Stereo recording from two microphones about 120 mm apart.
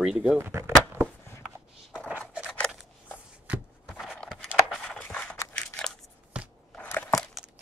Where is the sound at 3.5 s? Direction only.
15° right (ahead or behind).